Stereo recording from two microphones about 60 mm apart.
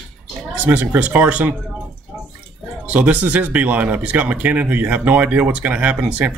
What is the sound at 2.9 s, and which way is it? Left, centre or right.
Speech, right.